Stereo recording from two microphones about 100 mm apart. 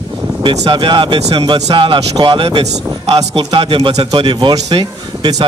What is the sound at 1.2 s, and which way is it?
Speech, 90° right.